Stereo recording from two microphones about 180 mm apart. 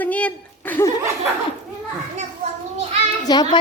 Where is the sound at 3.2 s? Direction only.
20° left (ahead or behind).